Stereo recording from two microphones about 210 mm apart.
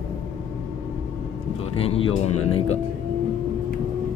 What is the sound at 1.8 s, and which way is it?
Speech, 30° left (ahead or behind).